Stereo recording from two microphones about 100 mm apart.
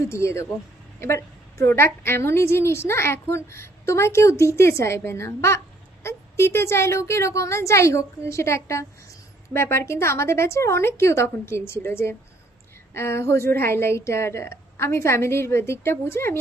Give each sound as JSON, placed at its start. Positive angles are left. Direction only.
{"t": 0.1, "sound": "a woman's voice", "side_deg": 30}